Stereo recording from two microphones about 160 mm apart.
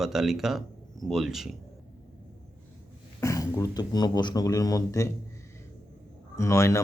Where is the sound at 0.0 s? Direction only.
Centre (ahead or behind).